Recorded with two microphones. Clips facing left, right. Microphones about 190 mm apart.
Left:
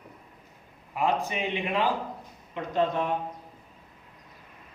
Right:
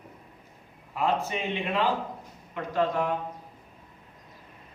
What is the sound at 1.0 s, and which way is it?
A man's voice, 15° left (ahead or behind).